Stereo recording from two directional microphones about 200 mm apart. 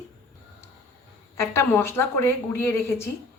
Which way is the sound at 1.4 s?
10° left (ahead or behind).